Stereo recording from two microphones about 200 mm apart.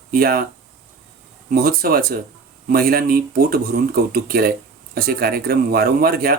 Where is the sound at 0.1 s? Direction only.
50° right (ahead or behind).